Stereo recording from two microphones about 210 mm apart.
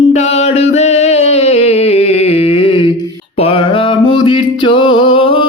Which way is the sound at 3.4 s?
25° left (ahead or behind).